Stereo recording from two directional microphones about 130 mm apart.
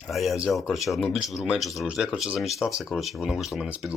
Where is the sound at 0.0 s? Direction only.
Centre (ahead or behind).